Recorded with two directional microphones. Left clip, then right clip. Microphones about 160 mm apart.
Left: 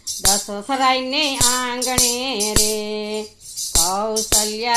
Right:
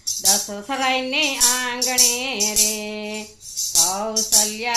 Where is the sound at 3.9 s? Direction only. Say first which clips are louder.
Left 2 dB; 40° left (ahead or behind).